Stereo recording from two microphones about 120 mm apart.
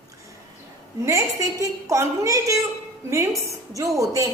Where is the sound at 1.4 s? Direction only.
25° right (ahead or behind).